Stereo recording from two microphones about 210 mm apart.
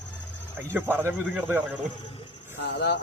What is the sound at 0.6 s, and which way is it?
A man's voice, 10° right (ahead or behind).